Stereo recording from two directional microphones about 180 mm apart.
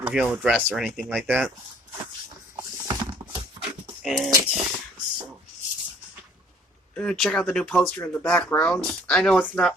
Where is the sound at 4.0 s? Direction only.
Centre (ahead or behind).